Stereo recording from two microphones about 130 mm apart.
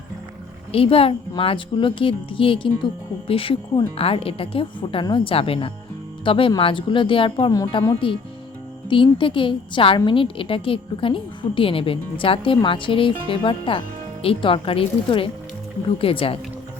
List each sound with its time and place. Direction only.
0.7 s a woman's voice: 45° left (ahead or behind)